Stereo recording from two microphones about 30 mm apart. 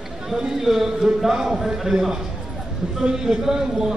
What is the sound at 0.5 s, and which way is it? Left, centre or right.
A man's voice, centre.